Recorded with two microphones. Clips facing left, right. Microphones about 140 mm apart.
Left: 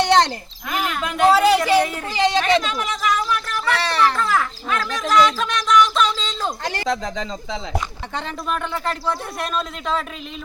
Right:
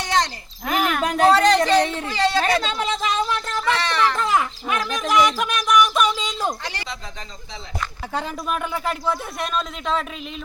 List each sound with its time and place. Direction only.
0.0 s a sound: 65° left (ahead or behind)
0.7 s speech: 55° right (ahead or behind)
1.0 s speech: 35° right (ahead or behind)
1.3 s speech: 5° left (ahead or behind)
1.8 s speech: 25° right (ahead or behind)
2.0 s speech: 15° left (ahead or behind)
2.6 s speech: 30° right (ahead or behind)
3.8 s a sound: 35° left (ahead or behind)
4.1 s a sound: 20° right (ahead or behind)
6.8 s speech: 90° left
8.1 s speech: 5° right (ahead or behind)